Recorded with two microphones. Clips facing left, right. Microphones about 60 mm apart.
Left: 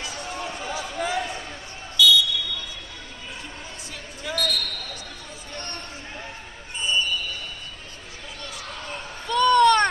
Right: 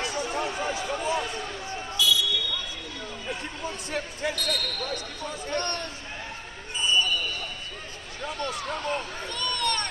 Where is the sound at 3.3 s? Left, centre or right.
Right.